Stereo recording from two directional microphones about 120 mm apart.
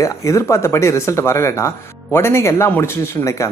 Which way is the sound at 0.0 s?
25° left (ahead or behind).